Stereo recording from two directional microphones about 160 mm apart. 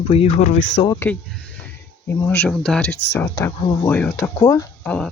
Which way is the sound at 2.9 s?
90° left.